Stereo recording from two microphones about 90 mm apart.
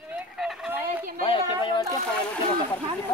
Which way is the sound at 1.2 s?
90° left.